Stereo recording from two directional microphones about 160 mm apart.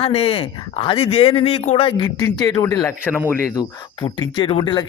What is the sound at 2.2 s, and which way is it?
Speech, 20° left (ahead or behind).